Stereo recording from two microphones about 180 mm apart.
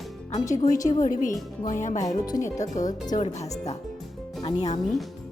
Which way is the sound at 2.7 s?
45° left (ahead or behind).